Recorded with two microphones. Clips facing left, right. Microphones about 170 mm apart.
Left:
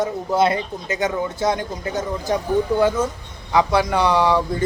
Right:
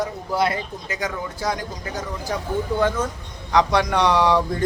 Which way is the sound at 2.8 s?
10° left (ahead or behind).